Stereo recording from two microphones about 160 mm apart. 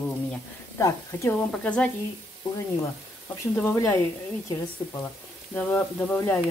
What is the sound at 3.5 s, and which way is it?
Speech, 15° left (ahead or behind).